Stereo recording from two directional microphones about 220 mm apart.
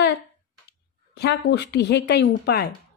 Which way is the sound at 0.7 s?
50° left (ahead or behind).